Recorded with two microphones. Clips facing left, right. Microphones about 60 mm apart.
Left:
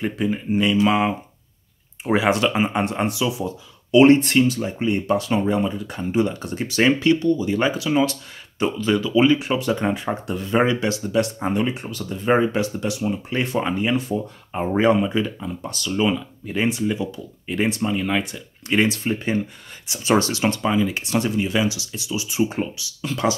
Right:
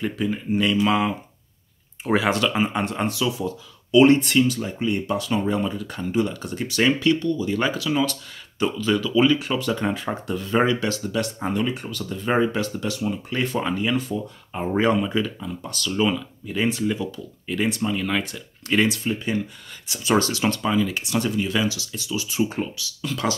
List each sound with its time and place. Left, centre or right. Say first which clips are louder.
0.0 s speech: left 2 dB; centre
2.0 s speech: left 2 dB; centre; by 5.4 s left
5.4 s speech: left 2 dB; centre
14.7 s speech: left 2 dB; centre
15.4 s speech: left 1 dB; left
16.0 s speech: left 1 dB; centre
18.9 s speech: left 2 dB; left
19.9 s speech: left 2 dB; left